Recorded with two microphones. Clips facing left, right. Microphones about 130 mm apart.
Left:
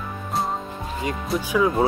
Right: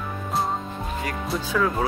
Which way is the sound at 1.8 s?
25° left (ahead or behind).